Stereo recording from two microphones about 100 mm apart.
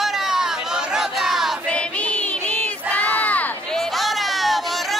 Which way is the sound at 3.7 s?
Centre (ahead or behind).